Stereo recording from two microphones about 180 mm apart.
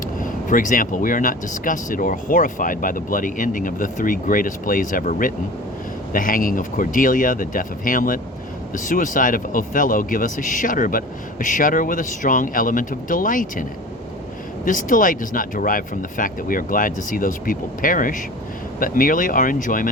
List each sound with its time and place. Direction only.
0.2 s speech: 50° left (ahead or behind)